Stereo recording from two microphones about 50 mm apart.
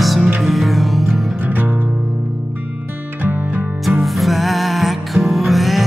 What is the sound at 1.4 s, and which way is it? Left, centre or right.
Music, right.